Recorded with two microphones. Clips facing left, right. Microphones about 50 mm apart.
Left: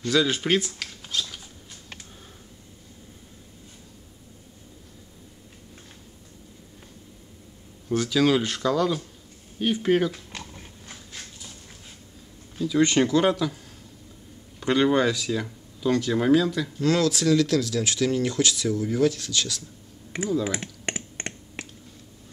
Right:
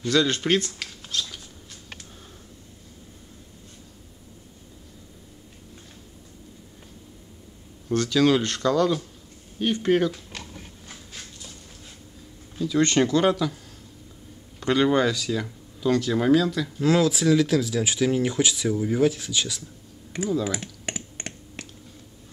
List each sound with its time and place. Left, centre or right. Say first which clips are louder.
0.1 s speech: right 1 dB; centre
7.9 s speech: right 1 dB; centre
12.5 s speech: even; centre
14.6 s speech: even; centre
16.8 s speech: right 2 dB; centre
20.4 s speech: left 1 dB; centre
20.9 s a sound: left 2 dB; centre